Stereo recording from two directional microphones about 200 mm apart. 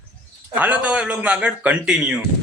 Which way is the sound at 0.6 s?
5° right (ahead or behind).